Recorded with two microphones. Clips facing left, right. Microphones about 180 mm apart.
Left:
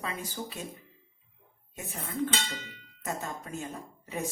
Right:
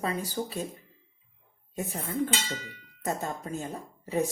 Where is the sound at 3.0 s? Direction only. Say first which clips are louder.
Right 4 dB; 35° right (ahead or behind).